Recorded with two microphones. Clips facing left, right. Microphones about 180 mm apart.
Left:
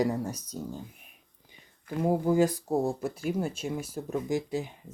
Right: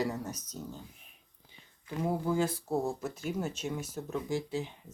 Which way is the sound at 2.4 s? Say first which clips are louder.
Left 5 dB; 15° left (ahead or behind).